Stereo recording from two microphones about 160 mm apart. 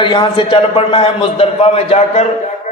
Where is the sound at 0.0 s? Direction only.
30° left (ahead or behind).